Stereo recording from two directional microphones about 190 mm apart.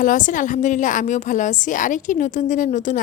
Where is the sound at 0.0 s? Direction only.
45° left (ahead or behind).